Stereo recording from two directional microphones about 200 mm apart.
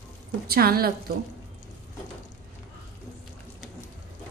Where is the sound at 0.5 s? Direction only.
50° right (ahead or behind).